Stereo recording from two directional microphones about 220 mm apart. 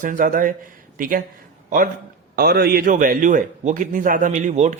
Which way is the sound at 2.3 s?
45° right (ahead or behind).